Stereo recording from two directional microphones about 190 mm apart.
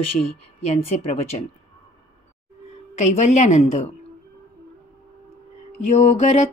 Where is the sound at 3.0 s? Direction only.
35° left (ahead or behind).